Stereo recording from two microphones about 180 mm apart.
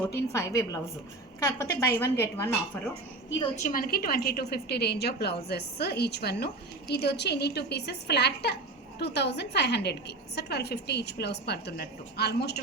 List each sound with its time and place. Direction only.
0.3 s a woman's voice: 15° left (ahead or behind)
3.6 s a woman's voice: 50° left (ahead or behind)